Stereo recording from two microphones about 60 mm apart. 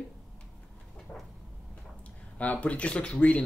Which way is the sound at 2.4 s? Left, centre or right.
Left.